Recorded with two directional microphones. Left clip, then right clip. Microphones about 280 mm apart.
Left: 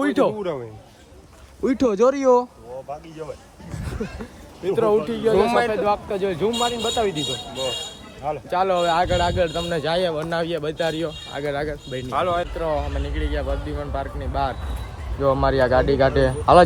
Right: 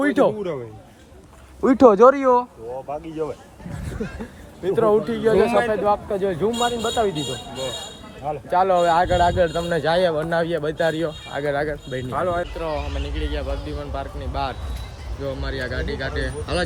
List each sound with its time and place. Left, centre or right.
0.0 s speech: centre
1.6 s speech: centre
3.2 s speech: right
4.0 s speech: centre
8.4 s speech: centre